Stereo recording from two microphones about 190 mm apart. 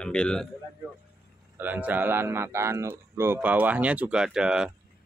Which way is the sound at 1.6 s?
10° right (ahead or behind).